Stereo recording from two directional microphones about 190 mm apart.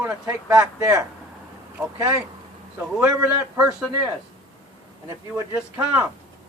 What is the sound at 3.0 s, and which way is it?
Speech, 15° right (ahead or behind).